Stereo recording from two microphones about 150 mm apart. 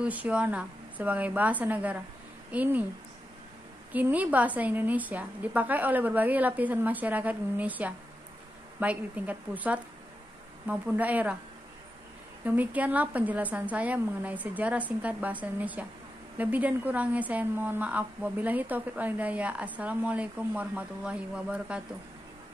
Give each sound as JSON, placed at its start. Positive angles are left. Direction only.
{"t": 0.0, "sound": "a woman's voice", "side_deg": -10}
{"t": 3.9, "sound": "a woman's voice", "side_deg": -10}
{"t": 12.4, "sound": "a woman's voice", "side_deg": -10}